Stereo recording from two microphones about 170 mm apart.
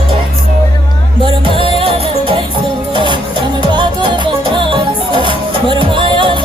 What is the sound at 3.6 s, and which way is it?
Music, 25° right (ahead or behind).